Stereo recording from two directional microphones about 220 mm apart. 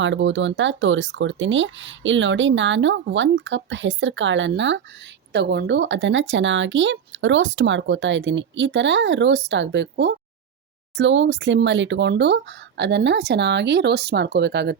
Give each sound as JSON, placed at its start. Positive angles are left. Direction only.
{"t": 0.0, "sound": "speech", "side_deg": -55}